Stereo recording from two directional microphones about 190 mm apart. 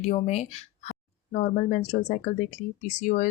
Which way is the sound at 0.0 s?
35° left (ahead or behind).